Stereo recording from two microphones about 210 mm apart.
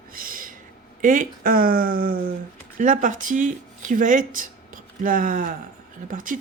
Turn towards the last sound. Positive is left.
turn(degrees=-40)  # may be behind; listen again after turning